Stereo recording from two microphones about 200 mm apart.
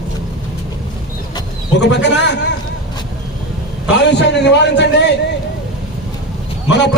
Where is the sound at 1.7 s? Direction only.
60° left (ahead or behind).